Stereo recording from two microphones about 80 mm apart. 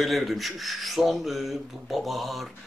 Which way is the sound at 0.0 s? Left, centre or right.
Centre.